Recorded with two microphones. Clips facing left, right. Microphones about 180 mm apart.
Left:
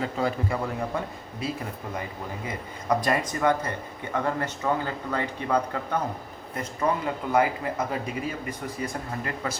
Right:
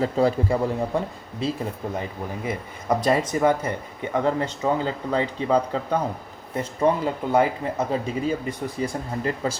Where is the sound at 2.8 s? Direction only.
25° right (ahead or behind).